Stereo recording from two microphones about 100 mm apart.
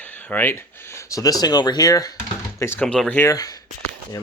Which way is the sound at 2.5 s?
25° left (ahead or behind).